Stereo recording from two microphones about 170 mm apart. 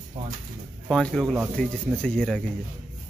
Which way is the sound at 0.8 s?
5° left (ahead or behind).